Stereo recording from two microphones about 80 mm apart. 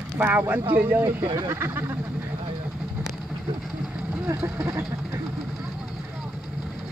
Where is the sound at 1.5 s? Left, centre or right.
Right.